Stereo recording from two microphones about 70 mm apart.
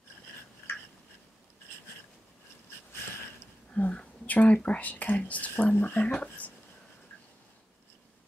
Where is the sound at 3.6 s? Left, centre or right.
Left.